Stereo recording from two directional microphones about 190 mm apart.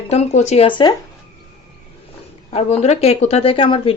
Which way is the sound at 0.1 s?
35° left (ahead or behind).